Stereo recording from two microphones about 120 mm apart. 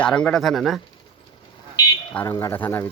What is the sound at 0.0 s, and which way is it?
Speech, 10° left (ahead or behind).